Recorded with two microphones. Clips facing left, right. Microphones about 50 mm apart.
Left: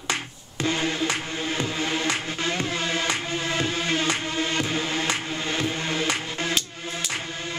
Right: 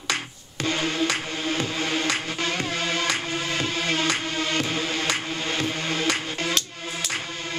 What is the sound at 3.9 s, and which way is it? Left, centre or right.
Music, left.